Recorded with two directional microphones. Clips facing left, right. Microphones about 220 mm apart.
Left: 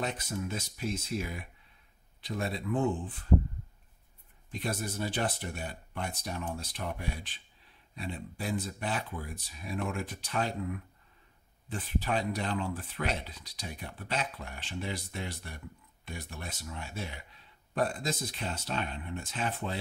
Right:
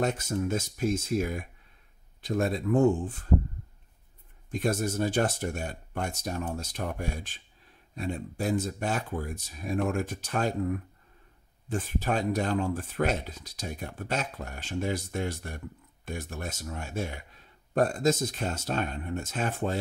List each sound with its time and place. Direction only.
0.0 s speech: 45° right (ahead or behind)
4.5 s speech: 45° right (ahead or behind)